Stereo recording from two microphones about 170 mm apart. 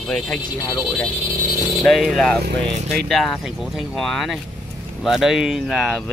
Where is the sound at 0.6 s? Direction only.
20° left (ahead or behind).